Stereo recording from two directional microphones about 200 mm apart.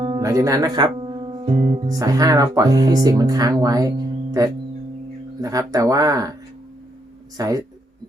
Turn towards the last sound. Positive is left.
turn(degrees=-15)  # may be behind; listen again after turning